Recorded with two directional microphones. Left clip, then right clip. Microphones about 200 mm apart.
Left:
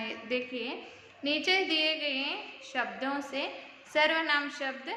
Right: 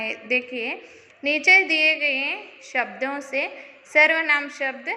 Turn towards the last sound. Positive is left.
turn(degrees=-30)  # may be behind; listen again after turning